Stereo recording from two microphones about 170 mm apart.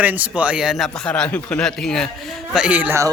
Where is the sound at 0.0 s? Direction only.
10° right (ahead or behind).